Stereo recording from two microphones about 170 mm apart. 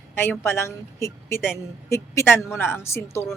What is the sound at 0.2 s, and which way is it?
A woman's voice, 15° left (ahead or behind).